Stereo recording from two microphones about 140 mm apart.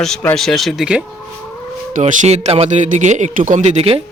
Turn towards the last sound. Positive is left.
turn(degrees=-45)  # may be behind; listen again after turning